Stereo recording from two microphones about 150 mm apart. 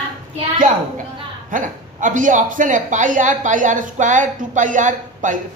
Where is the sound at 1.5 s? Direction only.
60° right (ahead or behind).